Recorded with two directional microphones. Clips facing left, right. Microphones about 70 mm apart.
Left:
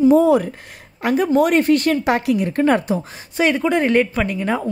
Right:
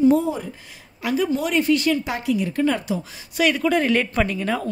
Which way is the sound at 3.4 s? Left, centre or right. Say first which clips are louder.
Left 2 dB; left.